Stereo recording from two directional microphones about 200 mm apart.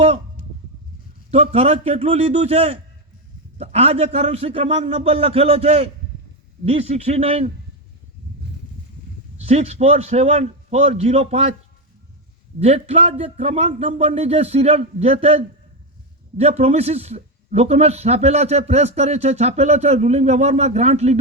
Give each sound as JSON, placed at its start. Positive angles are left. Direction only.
{"t": 1.3, "sound": "a man's voice", "side_deg": -30}
{"t": 9.5, "sound": "a man's voice", "side_deg": -30}
{"t": 12.5, "sound": "a man's voice", "side_deg": -30}